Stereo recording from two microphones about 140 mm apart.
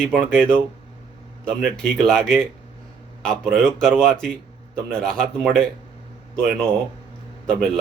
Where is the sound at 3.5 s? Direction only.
5° left (ahead or behind).